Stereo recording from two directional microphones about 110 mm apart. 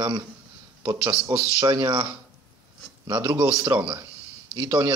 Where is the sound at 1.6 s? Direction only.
45° right (ahead or behind).